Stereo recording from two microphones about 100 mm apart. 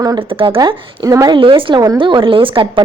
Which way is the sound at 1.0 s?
35° right (ahead or behind).